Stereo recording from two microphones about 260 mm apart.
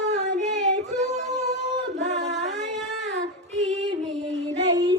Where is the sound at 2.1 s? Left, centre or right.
Right.